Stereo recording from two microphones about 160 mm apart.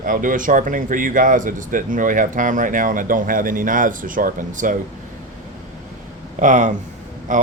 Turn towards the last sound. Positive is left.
turn(degrees=-55)  # may be behind; listen again after turning